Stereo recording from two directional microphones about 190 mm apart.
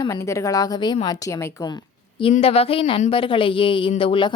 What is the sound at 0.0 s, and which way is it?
Speech, 15° left (ahead or behind).